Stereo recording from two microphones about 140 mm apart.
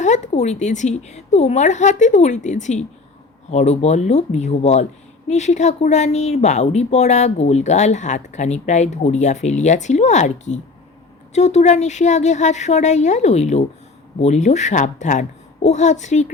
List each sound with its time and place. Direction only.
0.0 s a woman's voice: 55° left (ahead or behind)